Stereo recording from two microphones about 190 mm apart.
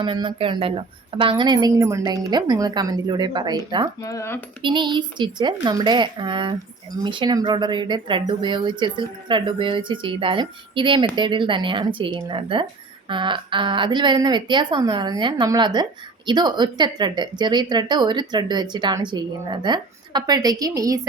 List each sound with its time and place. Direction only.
0.0 s a woman's voice: 25° right (ahead or behind)
4.0 s speech: 15° left (ahead or behind)
4.6 s a woman's voice: 25° right (ahead or behind)